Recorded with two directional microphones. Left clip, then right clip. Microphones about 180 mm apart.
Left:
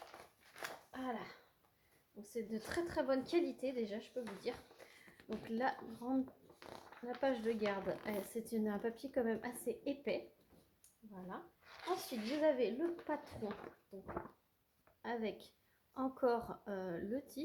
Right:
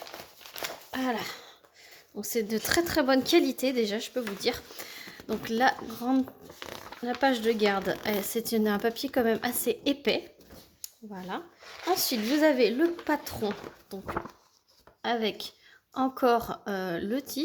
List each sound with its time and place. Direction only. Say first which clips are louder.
0.9 s speech: right 16 dB; 65° right (ahead or behind)
5.5 s speech: right 14 dB; 45° right (ahead or behind)
6.6 s zipper: right 13 dB; 15° right (ahead or behind)
7.0 s speech: right 12 dB; 50° right (ahead or behind)
11.6 s a sound: right 12 dB; centre (ahead or behind)
11.9 s speech: right 14 dB; 65° right (ahead or behind)
15.0 s speech: right 13 dB; 40° right (ahead or behind)